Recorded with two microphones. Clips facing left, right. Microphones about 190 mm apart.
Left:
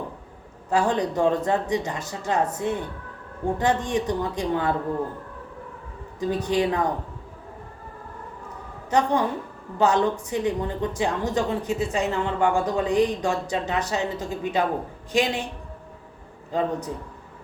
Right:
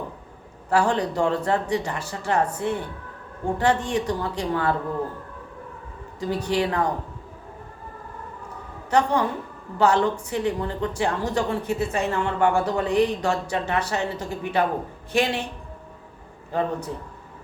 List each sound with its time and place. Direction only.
0.7 s a woman's voice: 15° left (ahead or behind)
6.1 s a woman's voice: 15° left (ahead or behind)
8.9 s a woman's voice: 15° left (ahead or behind)
16.5 s a woman's voice: 15° left (ahead or behind)